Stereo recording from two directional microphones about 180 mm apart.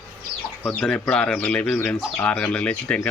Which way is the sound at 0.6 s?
5° left (ahead or behind).